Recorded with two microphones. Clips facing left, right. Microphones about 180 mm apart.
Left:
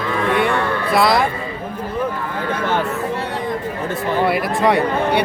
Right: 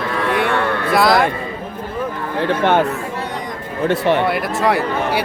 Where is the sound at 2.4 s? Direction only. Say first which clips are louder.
Right 6 dB; 70° right (ahead or behind).